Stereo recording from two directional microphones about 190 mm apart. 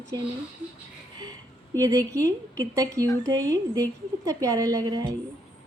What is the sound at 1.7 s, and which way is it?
A woman's voice, 15° right (ahead or behind).